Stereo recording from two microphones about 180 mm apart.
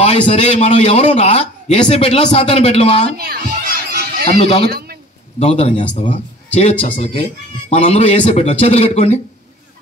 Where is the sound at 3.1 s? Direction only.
60° right (ahead or behind).